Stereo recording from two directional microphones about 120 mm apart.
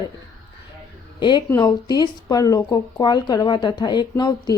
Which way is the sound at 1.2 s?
40° left (ahead or behind).